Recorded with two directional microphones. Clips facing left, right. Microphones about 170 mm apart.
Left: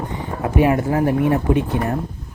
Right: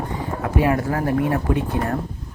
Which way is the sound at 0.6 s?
20° left (ahead or behind).